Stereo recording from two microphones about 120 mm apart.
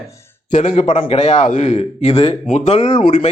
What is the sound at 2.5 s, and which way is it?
Speech, 75° left (ahead or behind).